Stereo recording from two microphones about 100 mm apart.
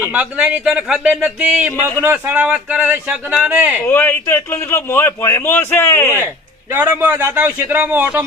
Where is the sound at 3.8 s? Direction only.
20° left (ahead or behind).